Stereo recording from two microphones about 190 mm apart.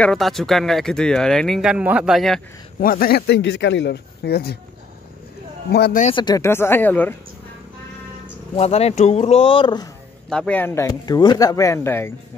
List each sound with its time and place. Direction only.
0.0 s speech: centre (ahead or behind)
2.8 s speech: 50° left (ahead or behind)
5.7 s speech: 55° left (ahead or behind)
6.1 s speech: 20° left (ahead or behind)
8.5 s speech: 35° left (ahead or behind)
10.3 s speech: 5° left (ahead or behind)